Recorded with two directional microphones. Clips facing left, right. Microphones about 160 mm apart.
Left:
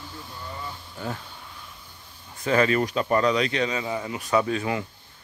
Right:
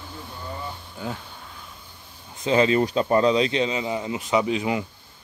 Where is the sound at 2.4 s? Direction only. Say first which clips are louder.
Right 2 dB; 25° right (ahead or behind).